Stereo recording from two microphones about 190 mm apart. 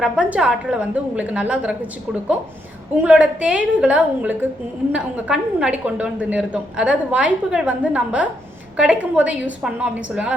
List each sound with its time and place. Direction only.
0.0 s a woman's voice: 5° right (ahead or behind)
3.0 s a woman's voice: 5° right (ahead or behind)